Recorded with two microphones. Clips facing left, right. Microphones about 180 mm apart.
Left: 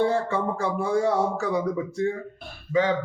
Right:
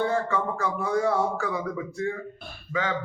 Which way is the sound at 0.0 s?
30° left (ahead or behind).